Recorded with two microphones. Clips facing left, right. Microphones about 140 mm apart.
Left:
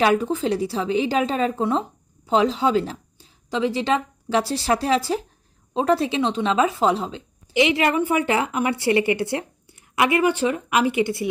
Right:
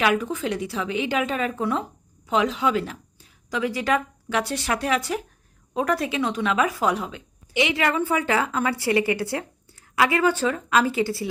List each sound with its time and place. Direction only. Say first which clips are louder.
0.0 s a woman's voice: left 3 dB; 30° left (ahead or behind)